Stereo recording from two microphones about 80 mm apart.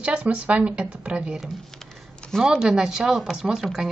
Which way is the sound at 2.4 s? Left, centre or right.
Centre.